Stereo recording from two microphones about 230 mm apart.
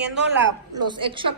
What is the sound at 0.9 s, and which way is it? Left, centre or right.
Speech, right.